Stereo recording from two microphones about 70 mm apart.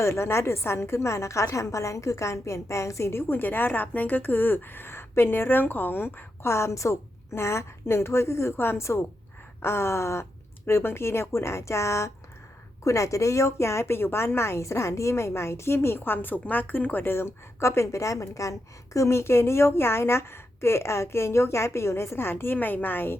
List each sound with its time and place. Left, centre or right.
0.0 s a woman's voice: left